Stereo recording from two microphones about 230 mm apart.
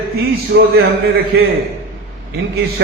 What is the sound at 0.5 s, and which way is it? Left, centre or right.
Speech, right.